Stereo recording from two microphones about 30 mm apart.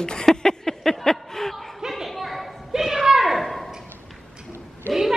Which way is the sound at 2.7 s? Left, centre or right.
Centre.